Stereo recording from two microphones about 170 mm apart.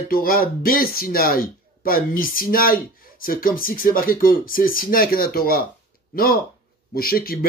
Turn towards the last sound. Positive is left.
turn(degrees=60)  # may be behind; listen again after turning